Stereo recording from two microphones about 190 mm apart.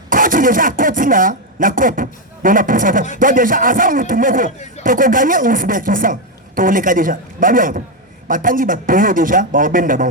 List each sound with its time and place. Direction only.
0.1 s a man's voice: 45° right (ahead or behind)